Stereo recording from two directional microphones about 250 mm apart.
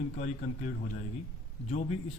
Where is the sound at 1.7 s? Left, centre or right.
Left.